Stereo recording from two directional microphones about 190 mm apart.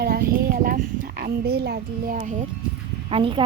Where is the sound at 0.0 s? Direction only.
55° right (ahead or behind).